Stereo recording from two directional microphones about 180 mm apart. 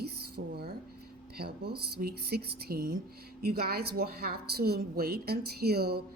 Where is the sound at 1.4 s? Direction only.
60° right (ahead or behind).